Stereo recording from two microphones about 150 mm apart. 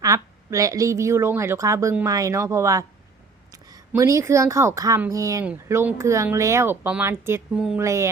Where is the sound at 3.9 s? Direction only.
20° right (ahead or behind).